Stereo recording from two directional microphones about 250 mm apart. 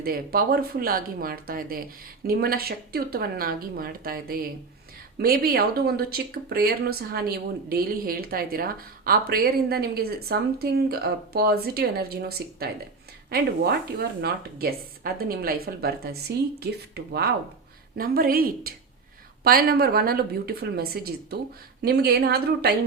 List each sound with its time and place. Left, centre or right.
0.0 s speech: right
14.2 s speech: right